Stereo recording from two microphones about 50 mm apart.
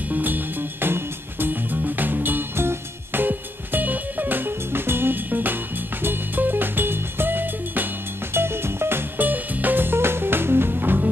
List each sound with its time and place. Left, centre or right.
0.1 s music: right
9.2 s music: right